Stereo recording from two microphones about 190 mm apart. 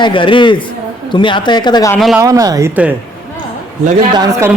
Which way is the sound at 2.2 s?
20° right (ahead or behind).